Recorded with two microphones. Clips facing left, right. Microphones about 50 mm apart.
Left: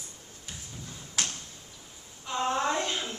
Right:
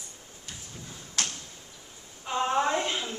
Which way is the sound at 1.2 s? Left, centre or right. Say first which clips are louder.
Right 1 dB; centre.